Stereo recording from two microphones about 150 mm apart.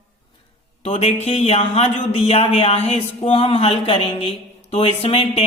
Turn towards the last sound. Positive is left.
turn(degrees=40)  # may be behind; listen again after turning